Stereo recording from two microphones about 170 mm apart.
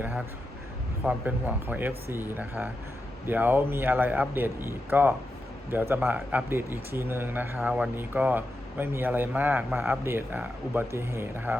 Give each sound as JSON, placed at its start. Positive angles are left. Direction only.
{"t": 1.0, "sound": "speech", "side_deg": -10}